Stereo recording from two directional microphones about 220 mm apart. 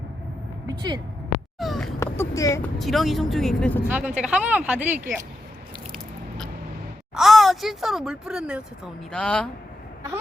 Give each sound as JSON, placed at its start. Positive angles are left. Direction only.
{"t": 0.7, "sound": "speech", "side_deg": -20}
{"t": 1.5, "sound": "speech", "side_deg": 0}
{"t": 2.0, "sound": "speech", "side_deg": 15}
{"t": 2.7, "sound": "speech", "side_deg": 0}
{"t": 3.8, "sound": "speech", "side_deg": -5}
{"t": 7.2, "sound": "speech", "side_deg": 0}